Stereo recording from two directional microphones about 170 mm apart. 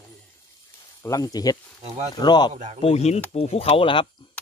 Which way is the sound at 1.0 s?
20° left (ahead or behind).